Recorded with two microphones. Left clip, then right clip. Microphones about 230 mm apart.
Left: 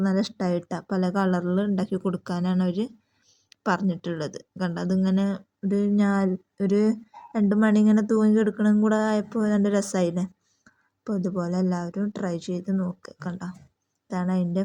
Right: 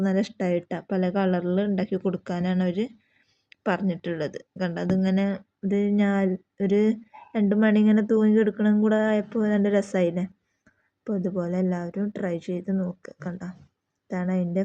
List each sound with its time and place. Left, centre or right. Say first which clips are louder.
0.0 s speech: right 1 dB; centre